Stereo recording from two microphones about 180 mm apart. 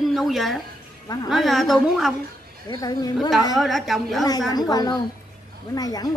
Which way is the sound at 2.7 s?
20° left (ahead or behind).